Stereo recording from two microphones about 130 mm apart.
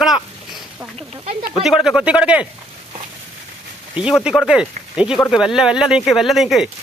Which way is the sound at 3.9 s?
5° right (ahead or behind).